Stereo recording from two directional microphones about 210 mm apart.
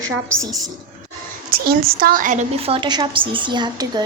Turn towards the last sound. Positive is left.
turn(degrees=-20)  # may be behind; listen again after turning